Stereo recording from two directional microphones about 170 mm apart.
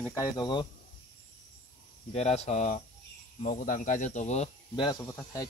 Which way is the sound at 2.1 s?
40° left (ahead or behind).